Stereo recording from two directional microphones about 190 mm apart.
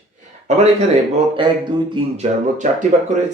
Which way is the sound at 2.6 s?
45° right (ahead or behind).